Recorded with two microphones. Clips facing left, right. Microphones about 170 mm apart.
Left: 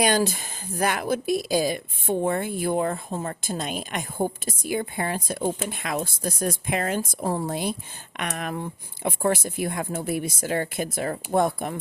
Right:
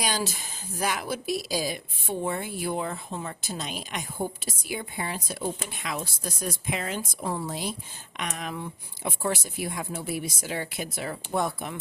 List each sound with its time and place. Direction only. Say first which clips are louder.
0.0 s speech: left 8 dB; 55° left (ahead or behind)
7.4 s speech: left 5 dB; 55° left (ahead or behind)